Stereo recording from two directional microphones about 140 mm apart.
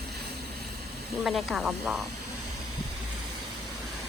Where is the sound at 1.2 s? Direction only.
Centre (ahead or behind).